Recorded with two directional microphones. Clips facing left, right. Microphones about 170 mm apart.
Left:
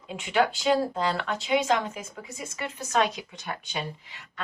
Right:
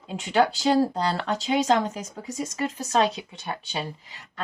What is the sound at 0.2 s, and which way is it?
Speech, 40° right (ahead or behind).